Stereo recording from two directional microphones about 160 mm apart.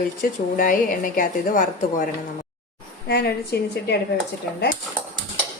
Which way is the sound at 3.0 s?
80° left.